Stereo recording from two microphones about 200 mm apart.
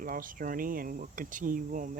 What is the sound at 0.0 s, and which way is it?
Speech, 45° right (ahead or behind).